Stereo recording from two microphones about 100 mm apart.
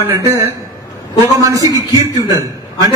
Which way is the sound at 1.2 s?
35° right (ahead or behind).